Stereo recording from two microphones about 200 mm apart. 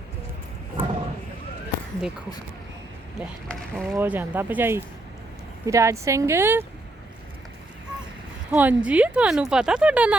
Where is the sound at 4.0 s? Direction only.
10° right (ahead or behind).